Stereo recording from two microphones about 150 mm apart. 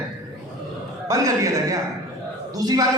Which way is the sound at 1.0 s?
25° right (ahead or behind).